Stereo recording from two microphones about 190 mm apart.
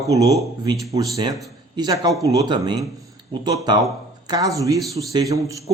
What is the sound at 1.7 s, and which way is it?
A man's voice, 20° right (ahead or behind).